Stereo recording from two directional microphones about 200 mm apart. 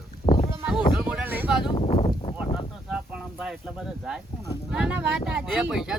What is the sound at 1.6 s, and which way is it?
Speech, 25° left (ahead or behind).